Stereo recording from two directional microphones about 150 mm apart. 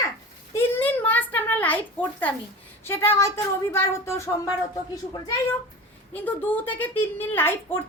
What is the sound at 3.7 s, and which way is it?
Speech, 15° left (ahead or behind).